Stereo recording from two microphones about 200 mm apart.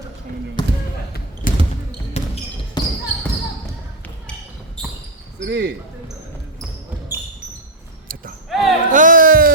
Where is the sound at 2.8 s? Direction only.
20° left (ahead or behind).